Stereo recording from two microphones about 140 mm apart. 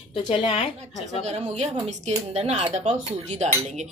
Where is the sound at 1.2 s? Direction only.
45° right (ahead or behind).